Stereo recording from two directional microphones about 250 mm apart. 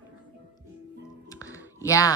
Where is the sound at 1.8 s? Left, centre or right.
Centre.